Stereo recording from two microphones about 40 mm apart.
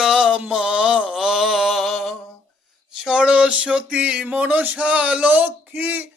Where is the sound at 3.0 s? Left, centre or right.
Right.